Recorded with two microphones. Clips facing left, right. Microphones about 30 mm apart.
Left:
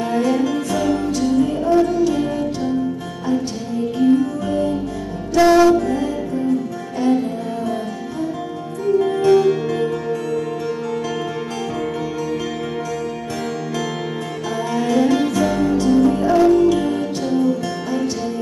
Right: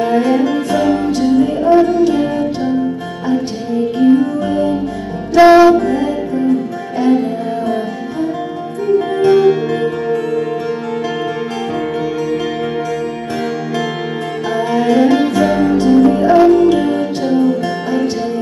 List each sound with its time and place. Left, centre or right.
0.0 s music: right
8.8 s music: right
14.6 s music: right